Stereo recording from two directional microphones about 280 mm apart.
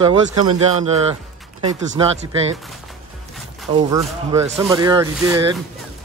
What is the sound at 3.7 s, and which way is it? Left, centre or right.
Speech, centre.